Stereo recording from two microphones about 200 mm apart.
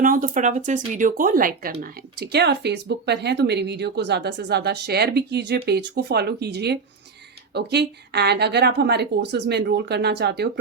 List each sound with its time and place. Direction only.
0.0 s speech: 40° right (ahead or behind)